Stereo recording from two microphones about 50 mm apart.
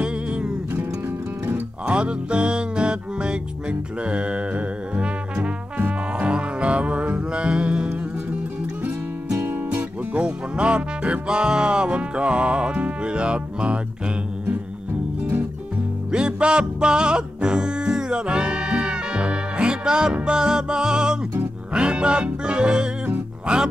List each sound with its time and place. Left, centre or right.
0.0 s music: right
0.7 s music: right
1.5 s music: right
8.8 s music: right
16.1 s music: centre